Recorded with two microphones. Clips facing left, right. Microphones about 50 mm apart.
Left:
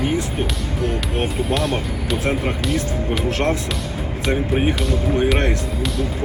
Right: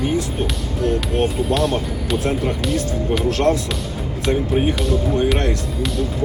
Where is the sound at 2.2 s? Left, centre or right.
Left.